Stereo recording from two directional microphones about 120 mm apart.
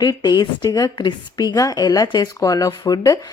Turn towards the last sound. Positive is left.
turn(degrees=30)  # may be behind; listen again after turning